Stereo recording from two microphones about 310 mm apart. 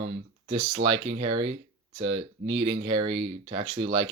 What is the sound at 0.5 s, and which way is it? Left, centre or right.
Speech, right.